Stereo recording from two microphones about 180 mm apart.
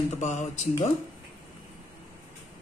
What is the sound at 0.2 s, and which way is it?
Speech, 40° left (ahead or behind).